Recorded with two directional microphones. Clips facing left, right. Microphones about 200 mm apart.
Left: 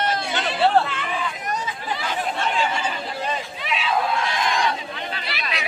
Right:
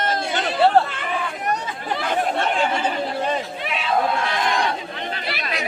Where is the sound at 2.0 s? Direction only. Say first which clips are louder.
Right 6 dB; 55° right (ahead or behind).